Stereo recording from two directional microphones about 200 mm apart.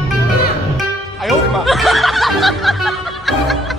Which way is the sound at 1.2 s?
Centre (ahead or behind).